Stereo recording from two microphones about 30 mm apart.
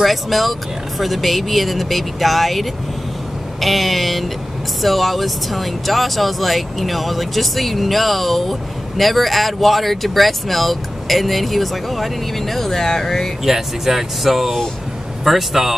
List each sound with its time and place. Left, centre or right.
0.0 s speech: centre
13.4 s speech: centre